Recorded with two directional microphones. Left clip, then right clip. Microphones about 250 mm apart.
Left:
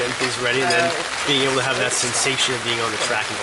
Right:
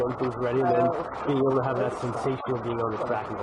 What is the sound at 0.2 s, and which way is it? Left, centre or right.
Speech, centre.